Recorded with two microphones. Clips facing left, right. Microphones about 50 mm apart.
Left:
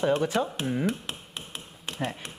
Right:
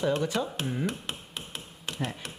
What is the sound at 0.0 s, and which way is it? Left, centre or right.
Speech, left.